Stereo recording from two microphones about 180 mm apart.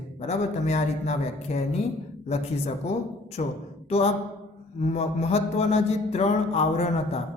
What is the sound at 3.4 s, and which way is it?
Mantra, 40° left (ahead or behind).